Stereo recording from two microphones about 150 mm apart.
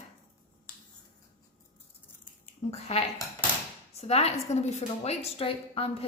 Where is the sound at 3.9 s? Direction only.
45° left (ahead or behind).